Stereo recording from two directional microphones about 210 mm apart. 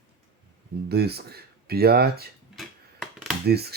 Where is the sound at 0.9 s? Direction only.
50° right (ahead or behind).